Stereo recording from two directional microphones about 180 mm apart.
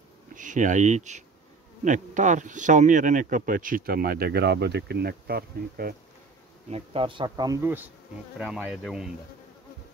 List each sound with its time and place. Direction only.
0.3 s speech: 45° right (ahead or behind)
6.7 s speech: 30° right (ahead or behind); by 7.9 s 10° right (ahead or behind)
8.4 s insect: 5° right (ahead or behind)